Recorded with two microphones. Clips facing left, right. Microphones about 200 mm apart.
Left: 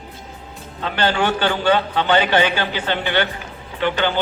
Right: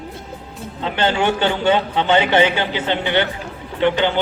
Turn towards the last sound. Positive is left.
turn(degrees=-20)  # may be behind; listen again after turning